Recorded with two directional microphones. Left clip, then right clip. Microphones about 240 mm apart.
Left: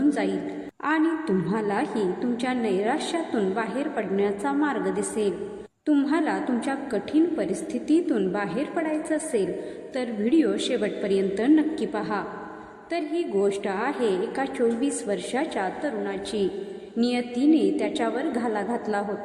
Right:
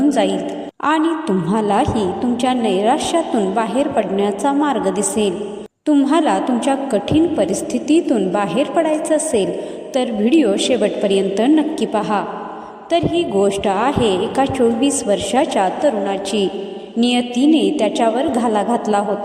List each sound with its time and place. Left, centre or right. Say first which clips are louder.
1.5 s a woman's voice: right 10 dB; right